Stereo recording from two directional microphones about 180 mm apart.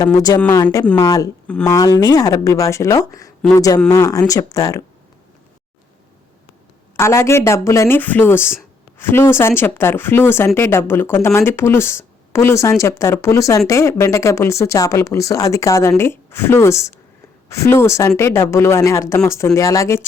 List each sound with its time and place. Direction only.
0.0 s speech: 20° left (ahead or behind)
6.9 s speech: 15° left (ahead or behind)